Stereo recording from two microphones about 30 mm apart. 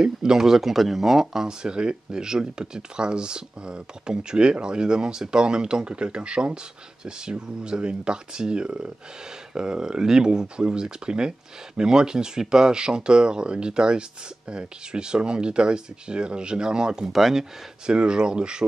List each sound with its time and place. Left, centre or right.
0.0 s speech: right
1.6 s speech: right
17.1 s speech: centre
17.8 s speech: right